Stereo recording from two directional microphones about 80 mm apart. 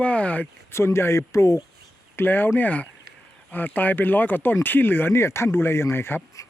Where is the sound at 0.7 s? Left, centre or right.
Left.